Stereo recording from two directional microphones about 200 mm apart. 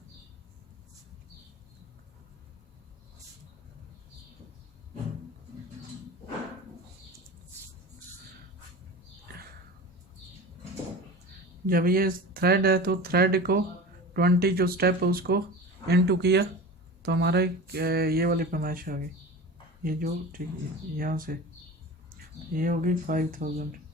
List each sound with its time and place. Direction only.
11.6 s speech: 45° right (ahead or behind)
22.5 s speech: 45° right (ahead or behind)